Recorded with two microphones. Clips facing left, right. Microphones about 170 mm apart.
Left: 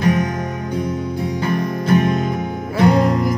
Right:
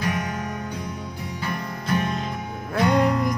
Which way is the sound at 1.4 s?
50° left (ahead or behind).